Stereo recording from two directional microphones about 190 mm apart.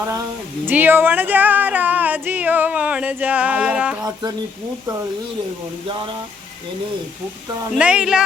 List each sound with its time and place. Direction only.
0.7 s speech: 10° right (ahead or behind)
4.0 s speech: 20° right (ahead or behind)
7.8 s speech: 5° right (ahead or behind)